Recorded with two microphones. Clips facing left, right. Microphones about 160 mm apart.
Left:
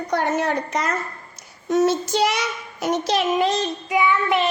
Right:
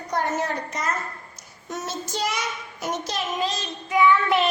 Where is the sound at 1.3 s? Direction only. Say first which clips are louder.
Left 17 dB; 65° left (ahead or behind).